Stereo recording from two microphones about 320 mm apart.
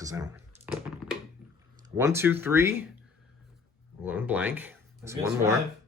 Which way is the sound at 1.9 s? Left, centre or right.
Centre.